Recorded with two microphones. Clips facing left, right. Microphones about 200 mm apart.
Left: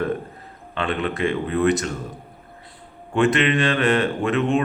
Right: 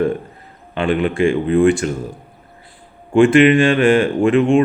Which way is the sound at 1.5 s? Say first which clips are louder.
Right 6 dB; 30° right (ahead or behind).